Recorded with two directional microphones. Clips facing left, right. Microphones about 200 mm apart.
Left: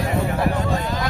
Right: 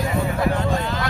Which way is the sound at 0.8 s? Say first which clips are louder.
Left 1 dB; 15° left (ahead or behind).